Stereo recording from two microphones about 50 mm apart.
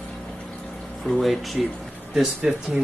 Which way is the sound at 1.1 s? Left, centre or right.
Centre.